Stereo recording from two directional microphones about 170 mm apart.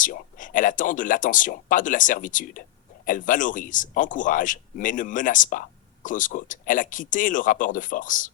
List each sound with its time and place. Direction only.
0.0 s speech: 50° left (ahead or behind)